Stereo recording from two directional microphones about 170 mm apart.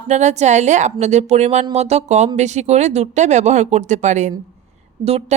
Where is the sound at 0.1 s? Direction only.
40° right (ahead or behind).